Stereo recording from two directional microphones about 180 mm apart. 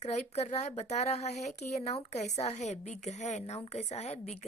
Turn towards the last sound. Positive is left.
turn(degrees=35)  # may be behind; listen again after turning